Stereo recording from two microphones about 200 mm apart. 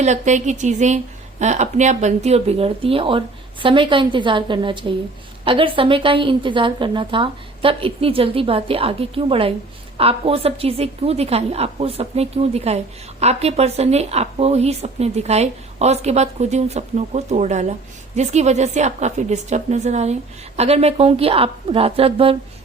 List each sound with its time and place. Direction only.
0.0 s a woman's voice: 35° right (ahead or behind)